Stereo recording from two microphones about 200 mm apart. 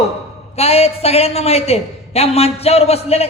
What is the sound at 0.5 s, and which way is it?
A woman's voice, 30° left (ahead or behind).